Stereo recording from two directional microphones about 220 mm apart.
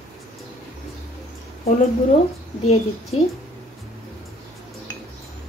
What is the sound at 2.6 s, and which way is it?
Speech, 30° left (ahead or behind).